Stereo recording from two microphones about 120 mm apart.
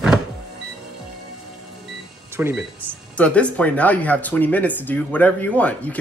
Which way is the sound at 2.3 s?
15° right (ahead or behind).